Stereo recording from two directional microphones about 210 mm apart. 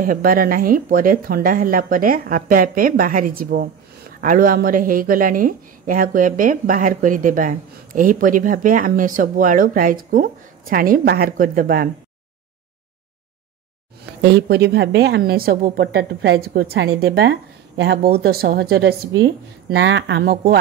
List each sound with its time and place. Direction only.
0.0 s a woman's voice: 40° right (ahead or behind)
14.2 s a woman's voice: 50° right (ahead or behind)